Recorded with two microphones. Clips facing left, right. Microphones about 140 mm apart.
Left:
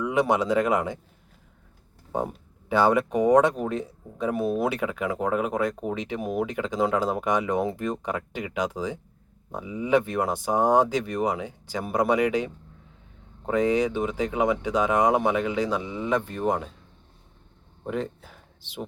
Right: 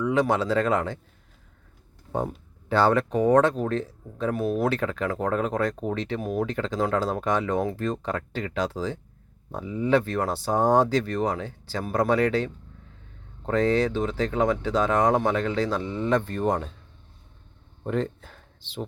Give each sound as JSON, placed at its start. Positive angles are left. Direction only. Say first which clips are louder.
{"t": 0.0, "sound": "speech", "louder": "even", "side_deg": 15}
{"t": 2.1, "sound": "speech", "louder": "even", "side_deg": 10}
{"t": 17.8, "sound": "speech", "louder": "right 3 dB", "side_deg": 5}